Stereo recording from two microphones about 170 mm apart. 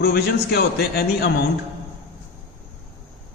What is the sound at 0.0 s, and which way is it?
A man's voice, 70° left (ahead or behind).